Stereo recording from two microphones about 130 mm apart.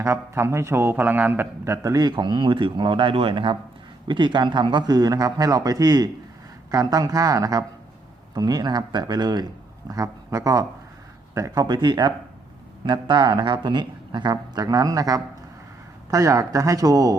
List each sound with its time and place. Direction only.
0.0 s a man's voice: 20° right (ahead or behind)